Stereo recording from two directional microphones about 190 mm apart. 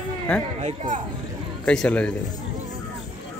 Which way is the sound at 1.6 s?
5° left (ahead or behind).